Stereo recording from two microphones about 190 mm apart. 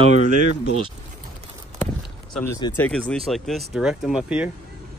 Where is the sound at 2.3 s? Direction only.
10° left (ahead or behind); by 4.4 s 5° right (ahead or behind).